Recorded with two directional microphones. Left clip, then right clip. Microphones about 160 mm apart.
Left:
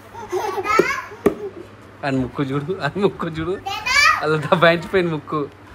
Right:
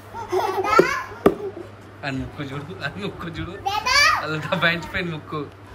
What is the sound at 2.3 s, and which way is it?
A man's voice, 20° left (ahead or behind).